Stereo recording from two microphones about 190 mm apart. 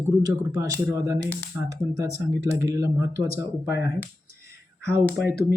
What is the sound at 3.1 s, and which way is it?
Speech, 55° left (ahead or behind).